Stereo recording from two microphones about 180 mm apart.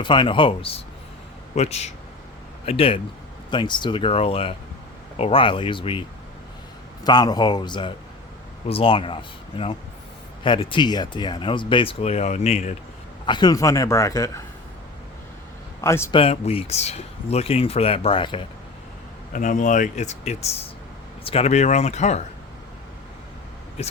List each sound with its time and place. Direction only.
0.0 s speech: 25° left (ahead or behind)
7.0 s speech: 20° left (ahead or behind); by 12.7 s 40° left (ahead or behind)
13.2 s a man's voice: 25° left (ahead or behind)
15.8 s a man's voice: 15° left (ahead or behind)
16.1 s speech: 35° left (ahead or behind)
19.3 s speech: 45° left (ahead or behind)
23.8 s speech: 35° left (ahead or behind)